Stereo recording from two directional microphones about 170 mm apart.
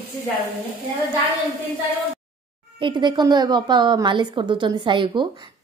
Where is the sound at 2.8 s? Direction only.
25° right (ahead or behind).